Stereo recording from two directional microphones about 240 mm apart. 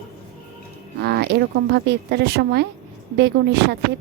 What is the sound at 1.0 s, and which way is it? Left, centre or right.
A woman's voice, right.